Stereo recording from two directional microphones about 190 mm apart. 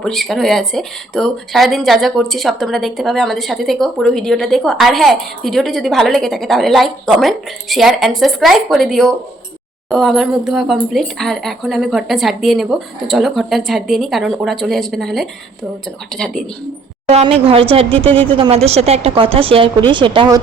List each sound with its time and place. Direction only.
0.0 s a woman's voice: centre (ahead or behind)
17.1 s a woman's voice: 30° right (ahead or behind)